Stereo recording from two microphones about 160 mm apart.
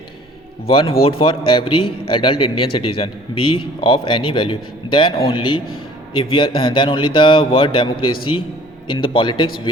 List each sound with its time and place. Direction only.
0.7 s a man's voice: 35° left (ahead or behind)